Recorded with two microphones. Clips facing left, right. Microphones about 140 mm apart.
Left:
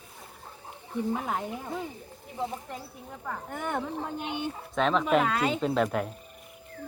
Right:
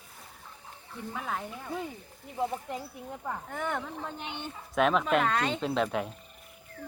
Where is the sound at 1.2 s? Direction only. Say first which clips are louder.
Left 3 dB; 20° left (ahead or behind).